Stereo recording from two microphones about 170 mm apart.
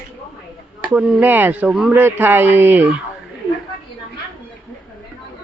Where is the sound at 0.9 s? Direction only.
10° right (ahead or behind).